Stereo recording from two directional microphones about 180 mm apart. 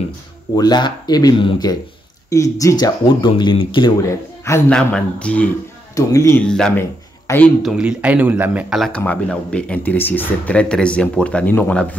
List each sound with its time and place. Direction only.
0.6 s speech: 25° left (ahead or behind)
4.5 s speech: 10° left (ahead or behind)
5.9 s speech: 20° left (ahead or behind)
6.4 s a man's voice: 5° left (ahead or behind)
7.6 s speech: 5° right (ahead or behind)